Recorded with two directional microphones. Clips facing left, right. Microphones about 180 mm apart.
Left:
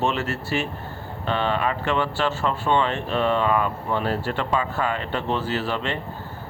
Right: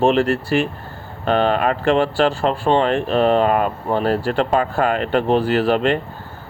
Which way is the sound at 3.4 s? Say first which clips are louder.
Right 5 dB; 55° right (ahead or behind).